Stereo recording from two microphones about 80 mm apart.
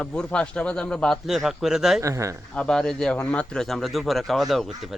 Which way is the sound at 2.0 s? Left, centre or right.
Right.